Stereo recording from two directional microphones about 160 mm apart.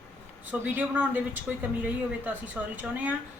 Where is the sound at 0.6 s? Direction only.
15° right (ahead or behind).